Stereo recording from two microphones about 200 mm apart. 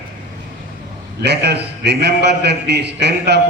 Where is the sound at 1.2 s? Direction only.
55° right (ahead or behind).